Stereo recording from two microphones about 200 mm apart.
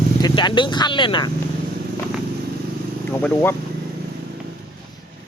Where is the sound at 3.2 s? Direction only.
5° left (ahead or behind).